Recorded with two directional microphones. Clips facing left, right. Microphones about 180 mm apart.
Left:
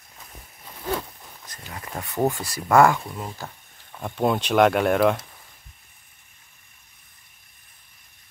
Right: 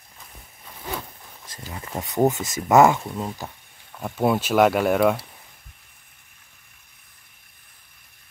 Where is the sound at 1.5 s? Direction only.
20° right (ahead or behind).